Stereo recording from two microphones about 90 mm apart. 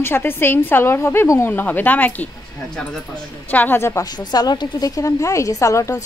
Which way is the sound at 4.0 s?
50° left (ahead or behind).